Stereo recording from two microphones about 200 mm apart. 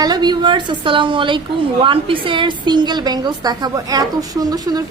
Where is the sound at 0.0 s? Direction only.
20° right (ahead or behind).